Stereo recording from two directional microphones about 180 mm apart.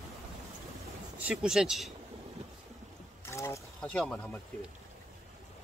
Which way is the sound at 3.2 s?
15° left (ahead or behind).